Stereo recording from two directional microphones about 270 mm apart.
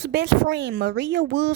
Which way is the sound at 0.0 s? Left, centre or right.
Right.